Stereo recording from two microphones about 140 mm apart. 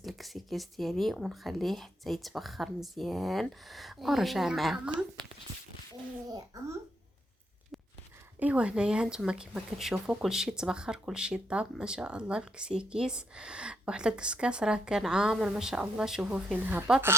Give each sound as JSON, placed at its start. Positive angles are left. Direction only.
{"t": 0.0, "sound": "speech", "side_deg": 0}
{"t": 6.2, "sound": "a child's voice", "side_deg": -25}
{"t": 8.4, "sound": "speech", "side_deg": -10}